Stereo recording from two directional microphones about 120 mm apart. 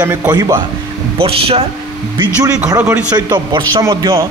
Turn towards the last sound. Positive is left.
turn(degrees=-30)  # may be behind; listen again after turning